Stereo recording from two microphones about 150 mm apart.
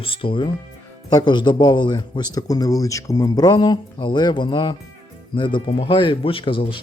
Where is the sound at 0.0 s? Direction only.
35° left (ahead or behind).